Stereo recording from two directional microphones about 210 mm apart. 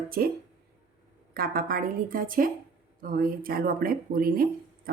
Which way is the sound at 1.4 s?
45° right (ahead or behind).